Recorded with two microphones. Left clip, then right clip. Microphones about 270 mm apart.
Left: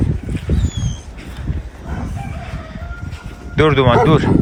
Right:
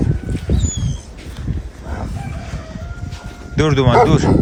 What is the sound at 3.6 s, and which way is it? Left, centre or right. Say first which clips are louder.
Speech: left 1 dB; centre.